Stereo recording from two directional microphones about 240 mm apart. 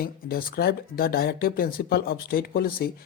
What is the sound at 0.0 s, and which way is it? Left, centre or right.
Speech, left.